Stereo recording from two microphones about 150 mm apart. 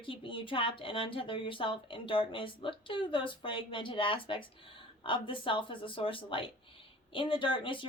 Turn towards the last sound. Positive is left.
turn(degrees=35)  # may be behind; listen again after turning